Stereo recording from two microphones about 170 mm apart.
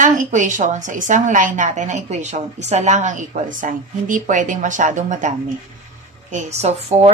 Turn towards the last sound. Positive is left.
turn(degrees=-40)  # may be behind; listen again after turning